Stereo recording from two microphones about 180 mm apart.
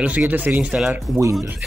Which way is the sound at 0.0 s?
5° right (ahead or behind).